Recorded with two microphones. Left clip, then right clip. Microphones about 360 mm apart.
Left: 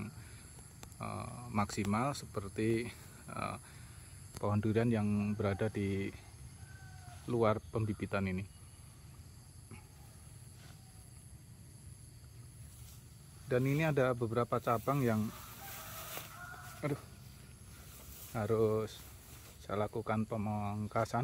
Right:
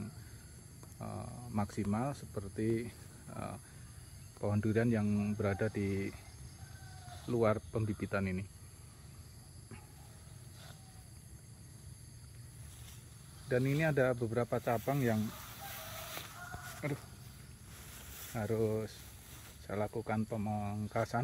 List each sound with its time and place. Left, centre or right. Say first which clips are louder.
0.9 s speech: left 3 dB; centre
7.2 s speech: even; centre
13.5 s speech: even; centre
16.8 s speech: left 2 dB; centre
18.3 s speech: left 3 dB; centre